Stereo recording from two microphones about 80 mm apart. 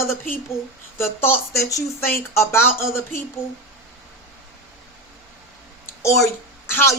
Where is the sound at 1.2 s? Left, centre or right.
Left.